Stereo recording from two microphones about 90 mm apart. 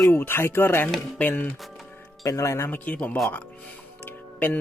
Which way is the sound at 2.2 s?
35° left (ahead or behind).